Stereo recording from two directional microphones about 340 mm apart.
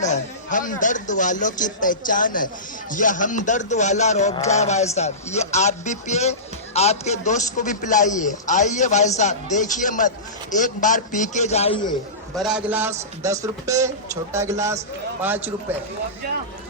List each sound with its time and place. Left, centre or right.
0.0 s speech: left
12.3 s a man's voice: centre